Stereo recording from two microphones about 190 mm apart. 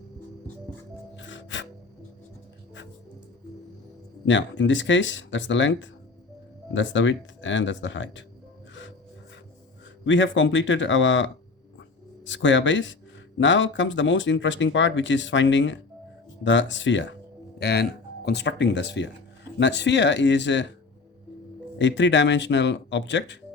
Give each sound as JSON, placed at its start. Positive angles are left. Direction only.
{"t": 1.1, "sound": "music", "side_deg": 80}
{"t": 4.3, "sound": "speech", "side_deg": 75}
{"t": 10.0, "sound": "speech", "side_deg": 75}
{"t": 17.6, "sound": "speech", "side_deg": 60}
{"t": 21.8, "sound": "speech", "side_deg": 70}